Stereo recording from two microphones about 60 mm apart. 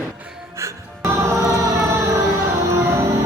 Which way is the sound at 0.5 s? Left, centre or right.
Right.